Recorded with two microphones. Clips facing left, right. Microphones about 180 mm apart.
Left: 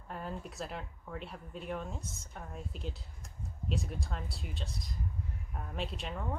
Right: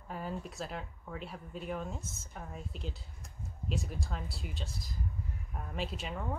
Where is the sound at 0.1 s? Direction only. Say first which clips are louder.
Right 2 dB; centre (ahead or behind).